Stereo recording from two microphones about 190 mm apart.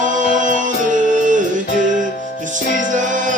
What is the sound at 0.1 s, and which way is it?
Music, 40° right (ahead or behind).